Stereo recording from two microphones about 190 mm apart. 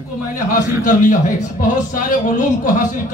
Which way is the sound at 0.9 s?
45° left (ahead or behind).